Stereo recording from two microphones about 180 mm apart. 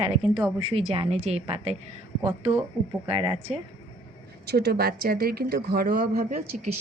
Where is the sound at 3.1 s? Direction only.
30° right (ahead or behind).